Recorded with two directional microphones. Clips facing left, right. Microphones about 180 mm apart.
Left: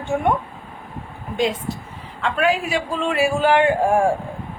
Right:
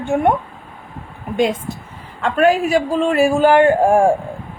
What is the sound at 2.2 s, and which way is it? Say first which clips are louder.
A woman's voice: right 6 dB; 45° right (ahead or behind).